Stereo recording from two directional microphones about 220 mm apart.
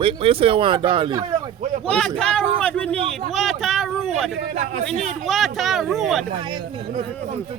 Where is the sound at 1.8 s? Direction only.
5° left (ahead or behind).